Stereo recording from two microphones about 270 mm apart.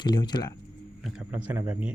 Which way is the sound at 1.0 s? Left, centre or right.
Centre.